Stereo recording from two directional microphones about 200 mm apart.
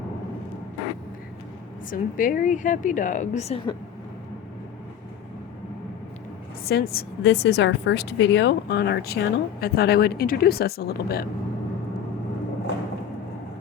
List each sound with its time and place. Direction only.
1.9 s a woman's voice: 40° left (ahead or behind)
6.7 s a woman's voice: 50° left (ahead or behind)